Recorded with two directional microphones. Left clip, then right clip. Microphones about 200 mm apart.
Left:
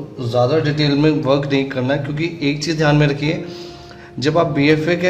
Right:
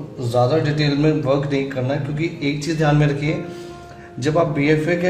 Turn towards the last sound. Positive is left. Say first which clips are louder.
# left 3 dB
turn(degrees=25)  # may be behind; listen again after turning